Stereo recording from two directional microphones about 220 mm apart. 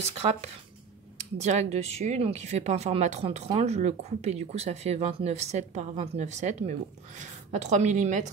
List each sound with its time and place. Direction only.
0.0 s speech: 30° right (ahead or behind)